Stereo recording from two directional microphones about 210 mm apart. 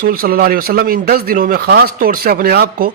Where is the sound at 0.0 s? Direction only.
45° right (ahead or behind).